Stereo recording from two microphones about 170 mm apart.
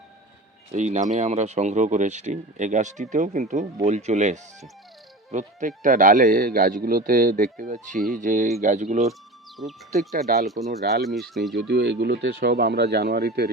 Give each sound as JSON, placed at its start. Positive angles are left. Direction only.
{"t": 0.7, "sound": "speech", "side_deg": -45}
{"t": 9.6, "sound": "speech", "side_deg": 0}
{"t": 10.6, "sound": "speech", "side_deg": -60}
{"t": 11.0, "sound": "speech", "side_deg": 0}
{"t": 11.5, "sound": "speech", "side_deg": -80}